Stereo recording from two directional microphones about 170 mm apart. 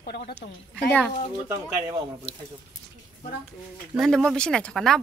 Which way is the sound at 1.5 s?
20° right (ahead or behind).